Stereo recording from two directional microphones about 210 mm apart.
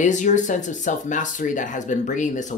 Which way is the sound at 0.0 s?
35° left (ahead or behind).